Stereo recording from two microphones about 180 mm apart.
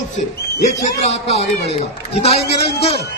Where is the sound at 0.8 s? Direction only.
35° left (ahead or behind).